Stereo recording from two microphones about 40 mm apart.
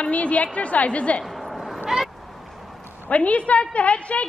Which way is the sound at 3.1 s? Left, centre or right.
Left.